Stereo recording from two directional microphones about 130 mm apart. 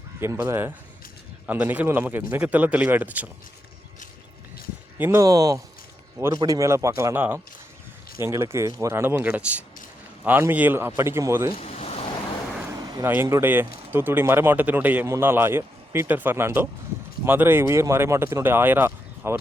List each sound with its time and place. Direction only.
0.2 s speech: 20° right (ahead or behind)
4.9 s speech: 20° right (ahead or behind)
11.5 s a sound: 55° left (ahead or behind)
12.7 s vehicle: 30° right (ahead or behind)
13.4 s speech: 15° right (ahead or behind)